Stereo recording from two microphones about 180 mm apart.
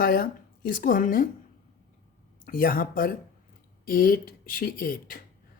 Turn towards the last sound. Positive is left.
turn(degrees=50)  # may be behind; listen again after turning